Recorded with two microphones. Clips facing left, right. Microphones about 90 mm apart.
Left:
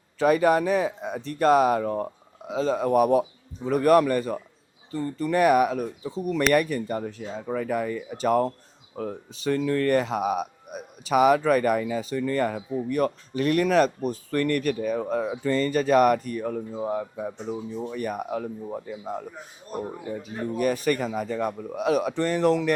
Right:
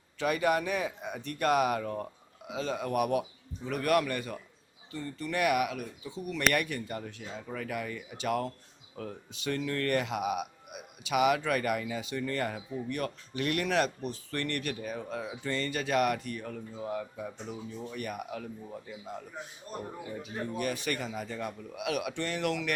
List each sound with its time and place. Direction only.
0.2 s speech: 35° left (ahead or behind)
20.6 s speech: 40° left (ahead or behind)